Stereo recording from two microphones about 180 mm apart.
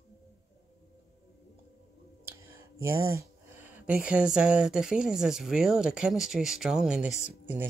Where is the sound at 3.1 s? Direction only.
10° right (ahead or behind).